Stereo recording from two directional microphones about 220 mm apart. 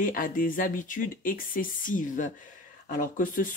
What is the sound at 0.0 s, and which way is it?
Speech, 40° left (ahead or behind).